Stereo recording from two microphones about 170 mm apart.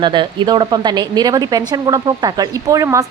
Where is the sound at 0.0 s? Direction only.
30° right (ahead or behind).